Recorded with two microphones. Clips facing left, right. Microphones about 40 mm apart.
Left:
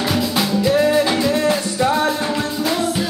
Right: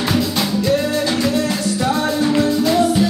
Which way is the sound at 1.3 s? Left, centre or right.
Left.